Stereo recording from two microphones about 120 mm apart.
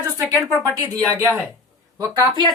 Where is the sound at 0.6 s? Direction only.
30° right (ahead or behind).